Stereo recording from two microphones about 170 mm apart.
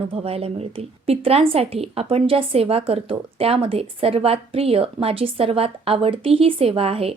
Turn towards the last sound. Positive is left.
turn(degrees=-35)  # may be behind; listen again after turning